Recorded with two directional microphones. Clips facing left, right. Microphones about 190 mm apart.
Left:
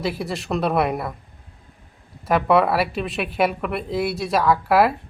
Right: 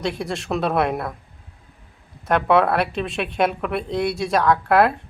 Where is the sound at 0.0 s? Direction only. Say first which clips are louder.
Even; 5° left (ahead or behind).